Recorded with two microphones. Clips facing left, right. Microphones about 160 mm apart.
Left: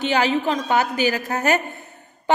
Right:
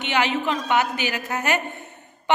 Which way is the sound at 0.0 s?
35° left (ahead or behind).